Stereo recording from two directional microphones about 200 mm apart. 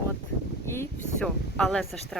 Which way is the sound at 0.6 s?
10° left (ahead or behind).